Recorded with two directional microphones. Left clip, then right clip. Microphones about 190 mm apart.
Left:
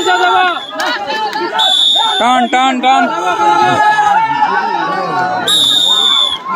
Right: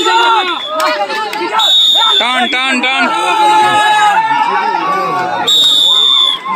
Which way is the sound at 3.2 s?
45° right (ahead or behind).